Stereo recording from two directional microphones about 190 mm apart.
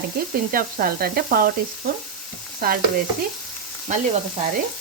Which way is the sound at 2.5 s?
50° right (ahead or behind).